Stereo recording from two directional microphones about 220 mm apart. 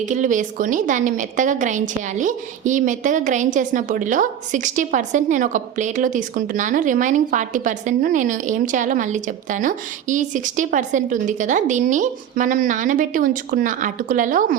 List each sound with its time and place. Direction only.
0.0 s a woman's voice: 35° right (ahead or behind)